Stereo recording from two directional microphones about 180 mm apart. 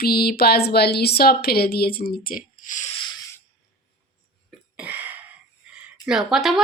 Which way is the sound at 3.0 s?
25° left (ahead or behind).